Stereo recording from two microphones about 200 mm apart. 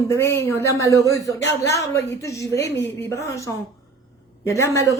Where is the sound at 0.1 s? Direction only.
10° left (ahead or behind).